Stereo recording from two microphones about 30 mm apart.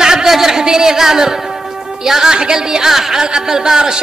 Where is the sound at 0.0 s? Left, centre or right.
Right.